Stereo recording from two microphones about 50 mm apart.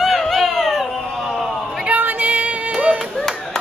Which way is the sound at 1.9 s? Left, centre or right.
Right.